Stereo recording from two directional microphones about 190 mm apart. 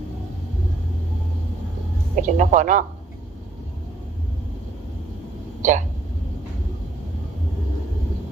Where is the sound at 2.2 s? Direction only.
40° right (ahead or behind).